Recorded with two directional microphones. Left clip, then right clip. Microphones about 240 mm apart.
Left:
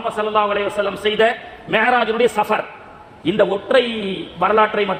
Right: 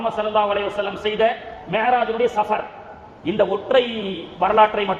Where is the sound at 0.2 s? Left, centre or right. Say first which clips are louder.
Left 3 dB; left.